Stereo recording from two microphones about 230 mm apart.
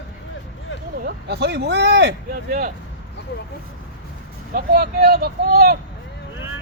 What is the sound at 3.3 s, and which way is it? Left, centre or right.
Speech, left.